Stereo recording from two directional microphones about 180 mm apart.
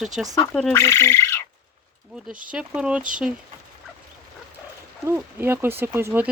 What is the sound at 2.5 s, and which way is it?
Speech, 5° right (ahead or behind).